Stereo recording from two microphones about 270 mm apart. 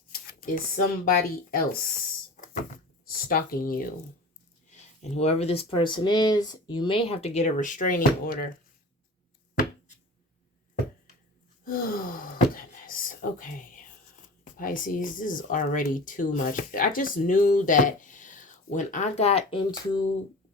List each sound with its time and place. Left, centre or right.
0.1 s speech: left
2.3 s a sound: left
3.1 s speech: left
11.6 s gasp: left
14.4 s speech: left